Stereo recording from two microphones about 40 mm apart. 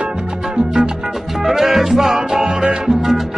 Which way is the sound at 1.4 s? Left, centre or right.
Centre.